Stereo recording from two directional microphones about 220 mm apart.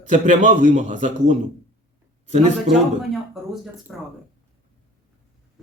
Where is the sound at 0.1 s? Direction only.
35° right (ahead or behind).